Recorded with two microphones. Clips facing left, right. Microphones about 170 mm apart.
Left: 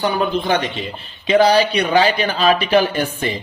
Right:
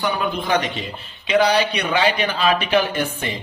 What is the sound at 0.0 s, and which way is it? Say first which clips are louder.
A man's voice: left 4 dB; 30° left (ahead or behind).